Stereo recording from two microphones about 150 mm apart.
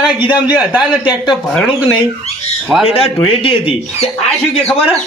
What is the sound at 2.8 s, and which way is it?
Speech, 40° left (ahead or behind).